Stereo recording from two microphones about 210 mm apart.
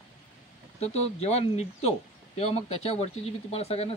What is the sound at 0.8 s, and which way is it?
Speech, 30° left (ahead or behind).